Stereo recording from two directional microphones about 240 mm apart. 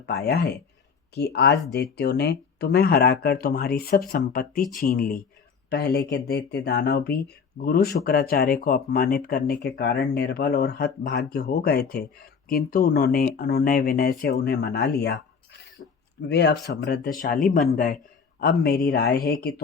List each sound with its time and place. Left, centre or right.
1.1 s speech: left
15.8 s a sound: left
16.2 s speech: left